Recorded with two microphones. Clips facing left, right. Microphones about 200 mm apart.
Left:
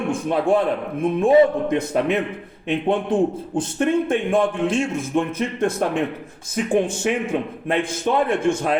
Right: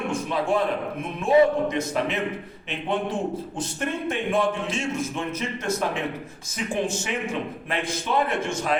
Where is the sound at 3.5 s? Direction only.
50° left (ahead or behind).